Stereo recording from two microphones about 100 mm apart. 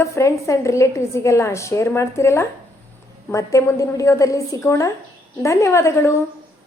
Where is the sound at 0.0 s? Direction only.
30° left (ahead or behind).